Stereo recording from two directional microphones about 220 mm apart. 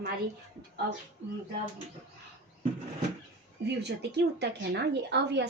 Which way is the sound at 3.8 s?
50° right (ahead or behind).